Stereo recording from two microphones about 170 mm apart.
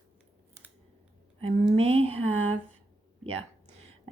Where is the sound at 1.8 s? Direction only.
35° right (ahead or behind).